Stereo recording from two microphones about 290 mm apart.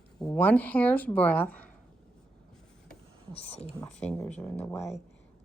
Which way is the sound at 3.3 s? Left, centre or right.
Left.